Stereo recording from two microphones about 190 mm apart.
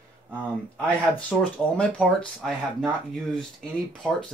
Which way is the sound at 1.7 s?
5° left (ahead or behind).